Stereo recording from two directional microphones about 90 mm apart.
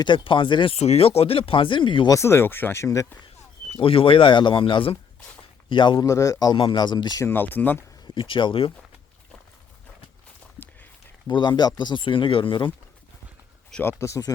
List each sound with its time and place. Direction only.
0.0 s speech: 70° left (ahead or behind)
2.0 s speech: 30° left (ahead or behind)
2.8 s a man's voice: 35° left (ahead or behind)
3.8 s speech: 90° left
5.6 s speech: 65° left (ahead or behind)
6.0 s a man's voice: 40° left (ahead or behind)
6.7 s speech: 55° left (ahead or behind)
7.2 s speech: 25° left (ahead or behind)
8.0 s speech: 70° left (ahead or behind)
11.3 s speech: 55° left (ahead or behind)
13.8 s a man's voice: 30° left (ahead or behind)